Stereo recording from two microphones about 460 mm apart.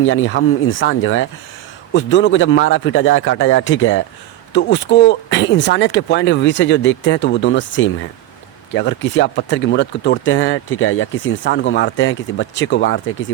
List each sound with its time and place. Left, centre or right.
0.0 s speech: left